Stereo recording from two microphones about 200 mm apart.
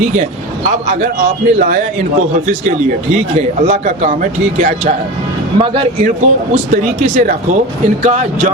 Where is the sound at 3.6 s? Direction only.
35° right (ahead or behind).